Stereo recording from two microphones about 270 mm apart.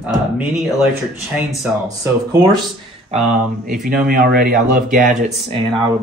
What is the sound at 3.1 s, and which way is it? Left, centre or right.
Speech, right.